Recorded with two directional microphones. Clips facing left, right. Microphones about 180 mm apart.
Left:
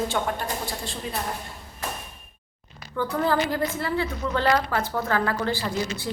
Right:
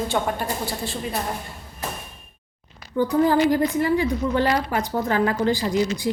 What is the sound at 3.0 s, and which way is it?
A woman's voice, 15° right (ahead or behind).